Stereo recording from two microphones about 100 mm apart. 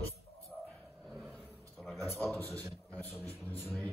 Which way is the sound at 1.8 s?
Centre (ahead or behind).